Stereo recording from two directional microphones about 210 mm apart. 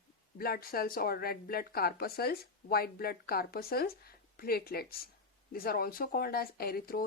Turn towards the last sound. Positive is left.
turn(degrees=45)  # may be behind; listen again after turning